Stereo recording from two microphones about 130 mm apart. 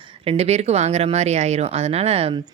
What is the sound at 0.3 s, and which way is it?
Speech, 55° right (ahead or behind).